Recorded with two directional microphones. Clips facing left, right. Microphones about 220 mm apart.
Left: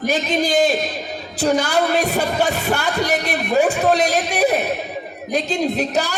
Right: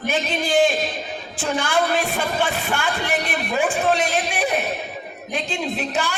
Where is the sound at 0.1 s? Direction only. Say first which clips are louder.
Left 2 dB; 40° left (ahead or behind).